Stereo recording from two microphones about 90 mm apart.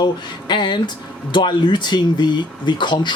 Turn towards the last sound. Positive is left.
turn(degrees=60)  # may be behind; listen again after turning